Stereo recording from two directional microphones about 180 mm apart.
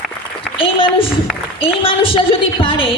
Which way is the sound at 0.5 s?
30° left (ahead or behind).